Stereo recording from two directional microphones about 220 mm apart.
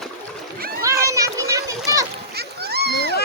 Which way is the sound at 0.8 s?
15° right (ahead or behind).